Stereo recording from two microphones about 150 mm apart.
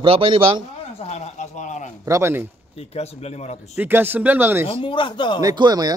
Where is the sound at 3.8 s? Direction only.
15° right (ahead or behind).